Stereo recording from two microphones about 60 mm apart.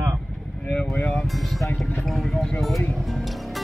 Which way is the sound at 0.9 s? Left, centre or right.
Centre.